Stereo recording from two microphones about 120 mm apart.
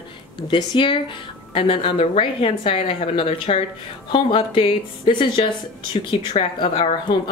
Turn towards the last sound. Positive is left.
turn(degrees=55)  # may be behind; listen again after turning